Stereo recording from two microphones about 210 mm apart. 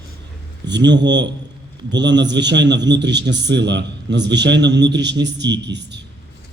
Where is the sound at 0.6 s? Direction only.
55° right (ahead or behind).